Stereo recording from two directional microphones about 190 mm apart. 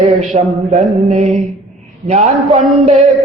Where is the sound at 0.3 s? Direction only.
35° right (ahead or behind).